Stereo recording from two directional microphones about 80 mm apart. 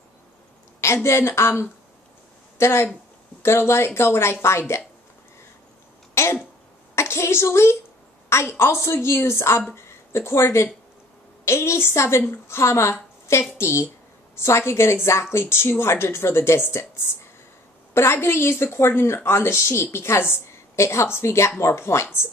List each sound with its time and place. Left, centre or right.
0.7 s a woman's voice: left
6.2 s cough: left
7.0 s a woman's voice: left